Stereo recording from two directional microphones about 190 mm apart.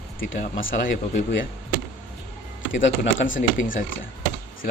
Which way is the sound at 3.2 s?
45° left (ahead or behind).